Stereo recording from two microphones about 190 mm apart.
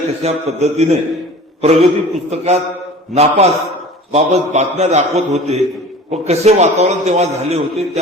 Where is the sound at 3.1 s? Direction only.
35° right (ahead or behind).